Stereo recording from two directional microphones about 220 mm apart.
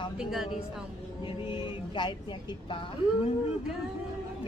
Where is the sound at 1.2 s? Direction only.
25° left (ahead or behind).